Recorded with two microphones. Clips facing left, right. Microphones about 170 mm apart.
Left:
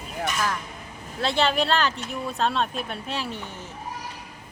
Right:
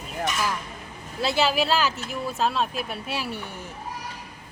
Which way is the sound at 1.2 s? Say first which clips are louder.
Even; 5° right (ahead or behind).